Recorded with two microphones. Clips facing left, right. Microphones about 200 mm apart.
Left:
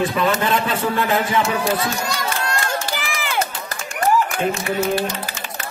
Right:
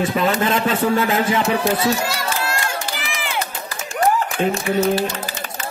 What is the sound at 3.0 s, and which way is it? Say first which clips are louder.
Run: left 2 dB; 45° left (ahead or behind).